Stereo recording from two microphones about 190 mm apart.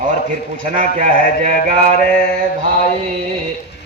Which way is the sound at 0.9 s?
40° right (ahead or behind).